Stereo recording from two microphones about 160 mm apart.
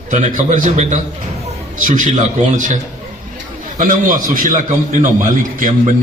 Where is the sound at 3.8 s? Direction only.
55° right (ahead or behind).